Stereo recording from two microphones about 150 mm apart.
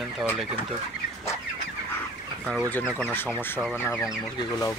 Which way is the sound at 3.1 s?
15° left (ahead or behind).